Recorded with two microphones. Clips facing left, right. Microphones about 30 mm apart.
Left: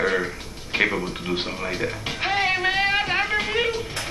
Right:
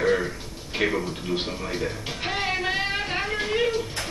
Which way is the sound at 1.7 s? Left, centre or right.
Left.